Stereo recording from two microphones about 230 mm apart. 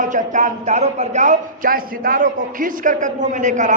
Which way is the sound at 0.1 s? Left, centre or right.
Right.